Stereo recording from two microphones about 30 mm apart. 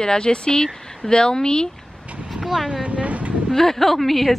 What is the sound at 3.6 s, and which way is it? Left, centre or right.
Speech, centre.